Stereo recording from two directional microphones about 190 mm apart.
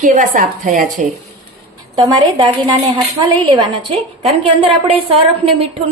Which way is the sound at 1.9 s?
20° right (ahead or behind).